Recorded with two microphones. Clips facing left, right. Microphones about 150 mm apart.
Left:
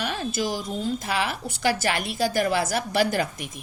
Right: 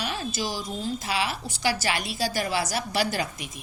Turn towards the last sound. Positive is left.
turn(degrees=55)  # may be behind; listen again after turning